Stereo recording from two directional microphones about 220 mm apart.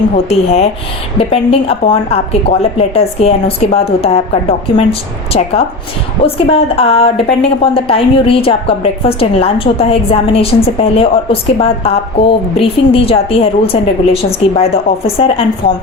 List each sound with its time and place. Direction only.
0.3 s a woman's voice: 30° left (ahead or behind)